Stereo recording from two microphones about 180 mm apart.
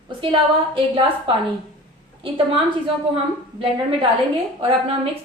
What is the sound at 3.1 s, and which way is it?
A woman's voice, 30° right (ahead or behind).